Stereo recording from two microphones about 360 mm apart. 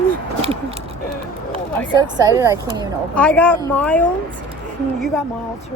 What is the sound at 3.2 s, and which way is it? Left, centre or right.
Speech, centre.